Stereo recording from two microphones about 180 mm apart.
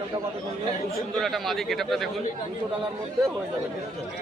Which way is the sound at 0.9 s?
Centre (ahead or behind).